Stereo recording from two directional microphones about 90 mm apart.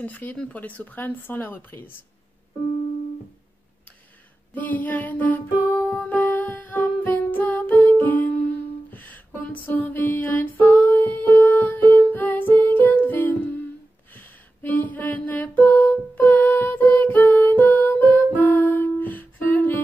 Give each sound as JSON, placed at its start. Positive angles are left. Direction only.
{"t": 0.0, "sound": "speech", "side_deg": 20}
{"t": 4.6, "sound": "music", "side_deg": 20}
{"t": 8.9, "sound": "a sound", "side_deg": 20}
{"t": 14.1, "sound": "music", "side_deg": 20}